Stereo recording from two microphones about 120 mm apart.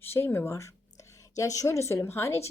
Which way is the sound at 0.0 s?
20° left (ahead or behind).